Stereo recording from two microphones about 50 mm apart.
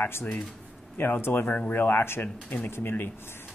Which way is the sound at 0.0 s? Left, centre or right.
Left.